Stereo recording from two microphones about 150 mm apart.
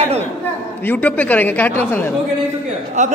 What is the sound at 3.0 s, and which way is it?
Speech, 50° right (ahead or behind).